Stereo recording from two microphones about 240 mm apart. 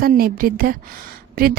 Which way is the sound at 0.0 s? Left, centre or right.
Right.